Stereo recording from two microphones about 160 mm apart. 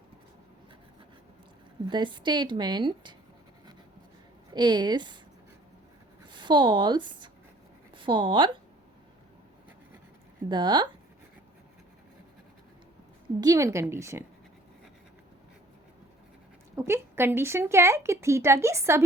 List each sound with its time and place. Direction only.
1.9 s a woman's voice: 30° right (ahead or behind)
4.5 s a woman's voice: 25° right (ahead or behind)
6.2 s speech: 30° right (ahead or behind)
10.5 s a woman's voice: 30° right (ahead or behind)
13.4 s a woman's voice: 20° right (ahead or behind)
16.7 s speech: 15° right (ahead or behind)